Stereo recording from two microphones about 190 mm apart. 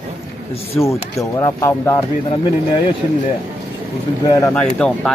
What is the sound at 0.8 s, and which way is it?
Speech, 15° left (ahead or behind).